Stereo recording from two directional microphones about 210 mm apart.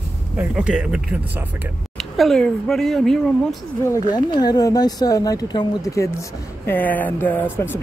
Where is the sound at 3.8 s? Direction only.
15° left (ahead or behind).